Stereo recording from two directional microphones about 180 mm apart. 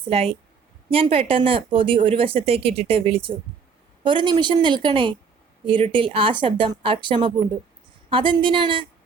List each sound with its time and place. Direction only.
0.0 s speech: 35° right (ahead or behind)